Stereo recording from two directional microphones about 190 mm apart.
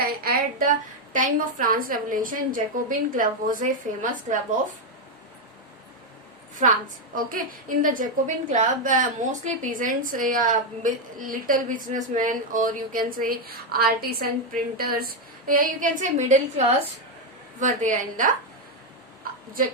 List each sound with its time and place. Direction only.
0.0 s a woman's voice: 50° right (ahead or behind)
6.6 s a woman's voice: 45° right (ahead or behind)